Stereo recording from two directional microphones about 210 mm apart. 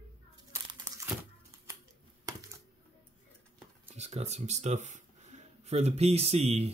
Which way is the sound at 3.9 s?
30° right (ahead or behind).